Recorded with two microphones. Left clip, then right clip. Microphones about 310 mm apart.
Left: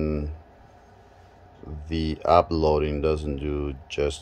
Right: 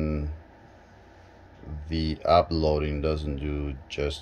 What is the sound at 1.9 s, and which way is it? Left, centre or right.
Speech, centre.